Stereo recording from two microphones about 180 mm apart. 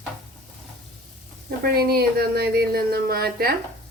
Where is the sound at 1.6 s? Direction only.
60° right (ahead or behind).